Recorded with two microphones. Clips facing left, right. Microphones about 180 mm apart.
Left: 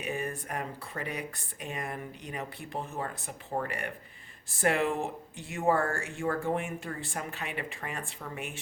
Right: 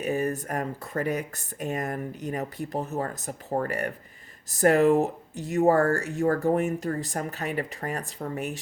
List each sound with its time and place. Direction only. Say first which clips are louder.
0.0 s speech: right 8 dB; 40° right (ahead or behind)